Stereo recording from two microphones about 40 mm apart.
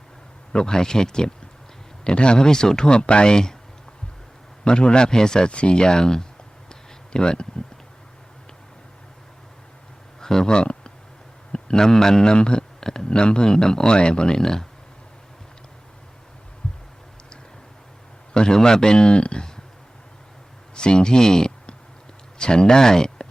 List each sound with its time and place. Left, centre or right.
0.5 s a man's voice: centre
4.6 s a man's voice: left
5.5 s a man's voice: left
6.7 s a sound: left
10.2 s a sound: centre
11.5 s a man's voice: centre
16.6 s a sound: left
18.3 s a man's voice: centre
20.7 s a man's voice: left